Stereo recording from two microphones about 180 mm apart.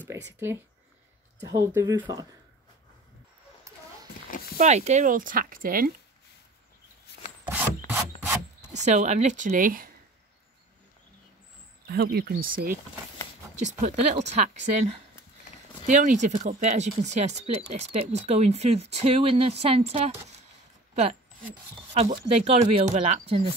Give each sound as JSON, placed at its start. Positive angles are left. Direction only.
{"t": 0.1, "sound": "a sound", "side_deg": -15}
{"t": 1.4, "sound": "speech", "side_deg": -20}
{"t": 3.7, "sound": "a sound", "side_deg": -15}
{"t": 4.6, "sound": "speech", "side_deg": -40}
{"t": 7.4, "sound": "wood", "side_deg": -10}
{"t": 8.8, "sound": "speech", "side_deg": -40}
{"t": 11.9, "sound": "speech", "side_deg": -60}
{"t": 13.6, "sound": "speech", "side_deg": -40}
{"t": 15.9, "sound": "speech", "side_deg": -45}
{"t": 20.9, "sound": "a sound", "side_deg": -40}
{"t": 22.3, "sound": "speech", "side_deg": -35}